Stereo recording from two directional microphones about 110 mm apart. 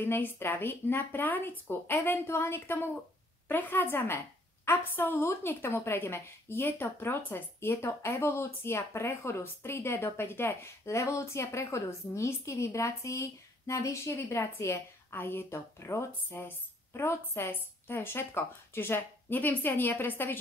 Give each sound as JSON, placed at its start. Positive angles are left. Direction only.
{"t": 0.0, "sound": "a woman's voice", "side_deg": 20}